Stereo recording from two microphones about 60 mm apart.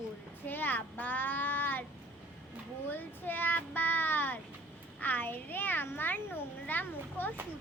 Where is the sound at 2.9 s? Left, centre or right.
Left.